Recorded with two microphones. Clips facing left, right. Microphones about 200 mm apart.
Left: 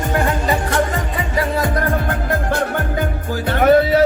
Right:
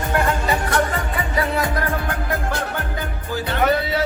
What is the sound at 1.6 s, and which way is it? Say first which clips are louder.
Music: left 4 dB; 50° left (ahead or behind).